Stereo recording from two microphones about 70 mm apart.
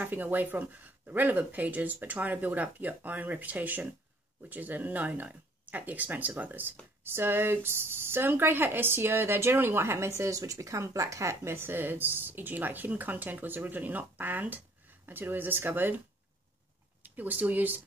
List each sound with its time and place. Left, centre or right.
0.0 s speech: right
17.0 s speech: right